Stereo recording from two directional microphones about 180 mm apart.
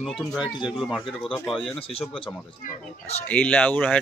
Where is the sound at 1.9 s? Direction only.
30° left (ahead or behind).